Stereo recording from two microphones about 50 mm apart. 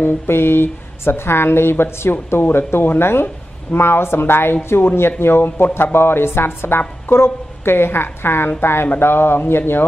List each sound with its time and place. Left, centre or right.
0.0 s speech: left